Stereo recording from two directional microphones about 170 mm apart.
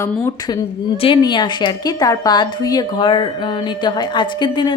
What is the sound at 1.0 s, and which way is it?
A woman's voice, 30° left (ahead or behind).